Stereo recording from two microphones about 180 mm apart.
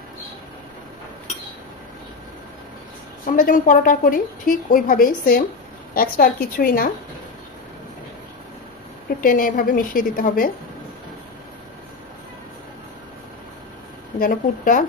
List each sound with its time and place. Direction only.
3.3 s a woman's voice: 50° left (ahead or behind)
9.2 s a woman's voice: 50° left (ahead or behind)
14.2 s a woman's voice: 50° left (ahead or behind)